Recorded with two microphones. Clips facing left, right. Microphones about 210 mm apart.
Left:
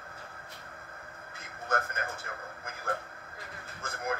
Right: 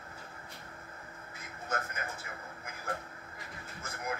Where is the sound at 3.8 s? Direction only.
55° left (ahead or behind).